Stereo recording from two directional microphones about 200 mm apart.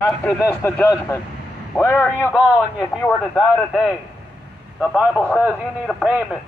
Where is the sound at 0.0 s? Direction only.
15° left (ahead or behind).